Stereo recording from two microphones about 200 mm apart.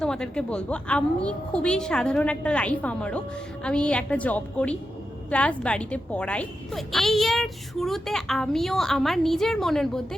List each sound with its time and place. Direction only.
0.0 s speech: 5° left (ahead or behind)